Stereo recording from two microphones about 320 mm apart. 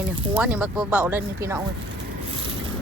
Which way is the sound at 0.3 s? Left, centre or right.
Centre.